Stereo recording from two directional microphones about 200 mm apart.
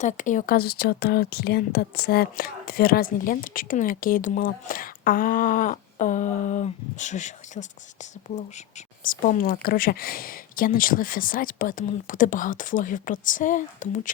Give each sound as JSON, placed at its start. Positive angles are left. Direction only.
{"t": 0.0, "sound": "speech", "side_deg": 40}
{"t": 9.0, "sound": "speech", "side_deg": 45}